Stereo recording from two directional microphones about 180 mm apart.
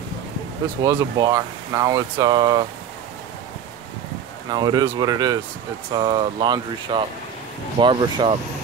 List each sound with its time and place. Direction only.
0.8 s speech: 20° right (ahead or behind)
4.5 s speech: 25° right (ahead or behind)